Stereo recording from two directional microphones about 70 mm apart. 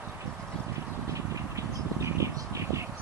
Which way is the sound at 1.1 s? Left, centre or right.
Right.